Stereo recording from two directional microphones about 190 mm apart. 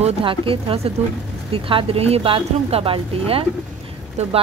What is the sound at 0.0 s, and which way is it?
Speech, 30° right (ahead or behind).